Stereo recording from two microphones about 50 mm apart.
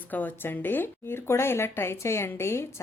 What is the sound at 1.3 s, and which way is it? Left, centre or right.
A woman's voice, left.